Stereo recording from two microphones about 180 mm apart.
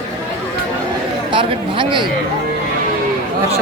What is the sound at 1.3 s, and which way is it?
Speech, 25° right (ahead or behind).